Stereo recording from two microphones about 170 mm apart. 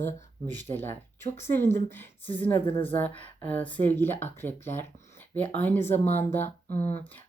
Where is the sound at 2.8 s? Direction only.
10° left (ahead or behind).